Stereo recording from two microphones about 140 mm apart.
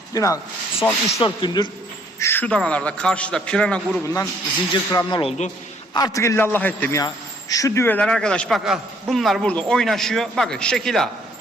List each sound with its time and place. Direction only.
0.1 s a man's voice: 25° left (ahead or behind)
1.2 s speech: 35° left (ahead or behind)
2.1 s a man's voice: 15° left (ahead or behind)
4.7 s a man's voice: 30° left (ahead or behind); by 11.1 s 5° left (ahead or behind)